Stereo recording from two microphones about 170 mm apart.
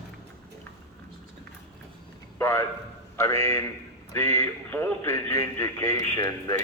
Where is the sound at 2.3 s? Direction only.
15° left (ahead or behind).